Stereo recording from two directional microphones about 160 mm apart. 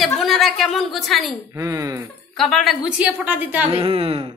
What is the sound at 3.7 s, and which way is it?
Speech, 35° right (ahead or behind).